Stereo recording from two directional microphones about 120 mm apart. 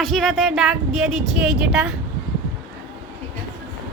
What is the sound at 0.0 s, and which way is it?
Speech, centre (ahead or behind).